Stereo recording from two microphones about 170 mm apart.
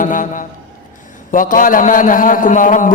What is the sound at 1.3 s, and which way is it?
A man's voice, 55° left (ahead or behind).